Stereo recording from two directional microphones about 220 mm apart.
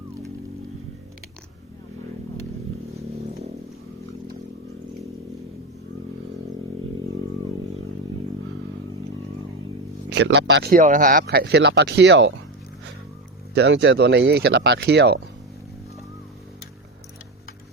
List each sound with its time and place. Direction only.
10.2 s speech: 55° right (ahead or behind)
13.5 s speech: 50° right (ahead or behind)